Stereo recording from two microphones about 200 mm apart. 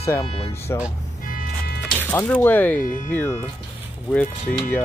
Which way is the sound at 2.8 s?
40° left (ahead or behind).